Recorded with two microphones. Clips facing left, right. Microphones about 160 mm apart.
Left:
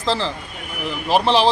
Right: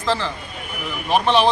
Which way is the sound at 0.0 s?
35° left (ahead or behind).